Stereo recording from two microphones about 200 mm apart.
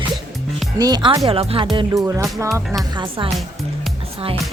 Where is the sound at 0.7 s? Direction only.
20° right (ahead or behind).